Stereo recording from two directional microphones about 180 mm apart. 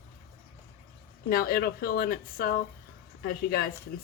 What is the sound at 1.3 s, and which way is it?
A woman's voice, 55° left (ahead or behind).